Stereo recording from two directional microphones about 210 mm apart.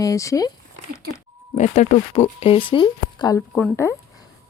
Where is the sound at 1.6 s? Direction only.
35° left (ahead or behind).